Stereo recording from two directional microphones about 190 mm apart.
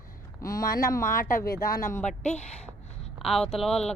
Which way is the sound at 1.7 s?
15° left (ahead or behind).